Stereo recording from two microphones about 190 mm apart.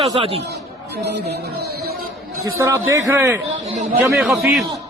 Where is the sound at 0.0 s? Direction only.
30° right (ahead or behind).